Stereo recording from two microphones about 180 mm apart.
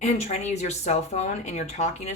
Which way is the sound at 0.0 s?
40° left (ahead or behind).